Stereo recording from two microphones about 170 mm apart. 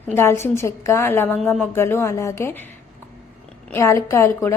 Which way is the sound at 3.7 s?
15° left (ahead or behind).